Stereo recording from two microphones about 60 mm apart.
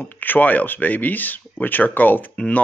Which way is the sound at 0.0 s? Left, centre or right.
Left.